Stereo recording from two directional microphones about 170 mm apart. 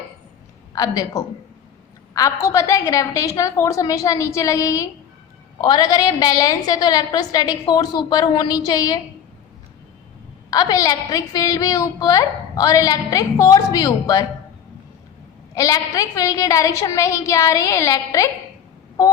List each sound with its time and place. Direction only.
0.8 s a woman's voice: 20° left (ahead or behind)
10.5 s a woman's voice: 20° left (ahead or behind)
15.5 s a woman's voice: 20° left (ahead or behind)